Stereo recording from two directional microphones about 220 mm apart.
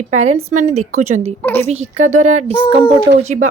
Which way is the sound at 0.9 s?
85° right.